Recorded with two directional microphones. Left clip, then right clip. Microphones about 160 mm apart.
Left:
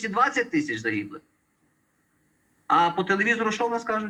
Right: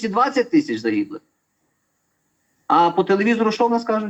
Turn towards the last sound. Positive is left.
turn(degrees=-35)  # may be behind; listen again after turning